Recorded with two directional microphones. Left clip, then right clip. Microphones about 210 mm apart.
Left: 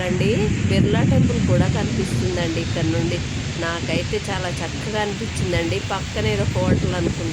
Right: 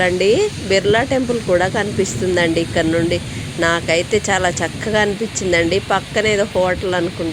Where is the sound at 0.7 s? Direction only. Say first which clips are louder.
Right 8 dB; 25° right (ahead or behind).